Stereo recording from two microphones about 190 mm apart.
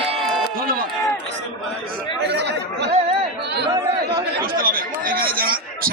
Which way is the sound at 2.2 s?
65° right (ahead or behind).